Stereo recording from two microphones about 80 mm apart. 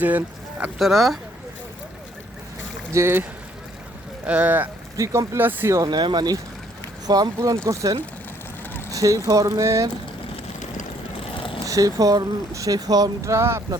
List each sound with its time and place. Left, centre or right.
0.0 s speech: right
0.8 s speech: centre
2.9 s speech: right
4.3 s speech: centre
4.9 s speech: right
5.9 s speech: right
11.6 s speech: right
13.3 s speech: right